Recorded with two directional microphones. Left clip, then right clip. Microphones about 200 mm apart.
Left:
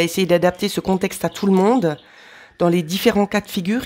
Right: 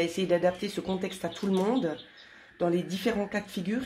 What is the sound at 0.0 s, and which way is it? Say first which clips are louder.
Speech: left 9 dB; 50° left (ahead or behind).